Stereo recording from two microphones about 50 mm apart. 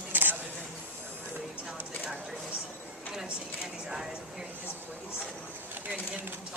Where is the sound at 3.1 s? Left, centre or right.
Centre.